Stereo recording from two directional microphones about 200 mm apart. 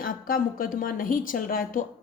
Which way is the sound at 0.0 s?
45° left (ahead or behind).